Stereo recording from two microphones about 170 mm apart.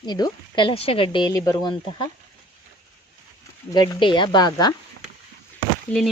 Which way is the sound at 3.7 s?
25° left (ahead or behind).